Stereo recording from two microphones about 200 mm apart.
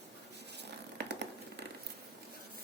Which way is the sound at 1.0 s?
60° right (ahead or behind).